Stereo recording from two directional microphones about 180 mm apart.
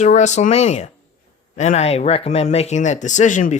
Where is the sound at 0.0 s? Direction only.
40° left (ahead or behind).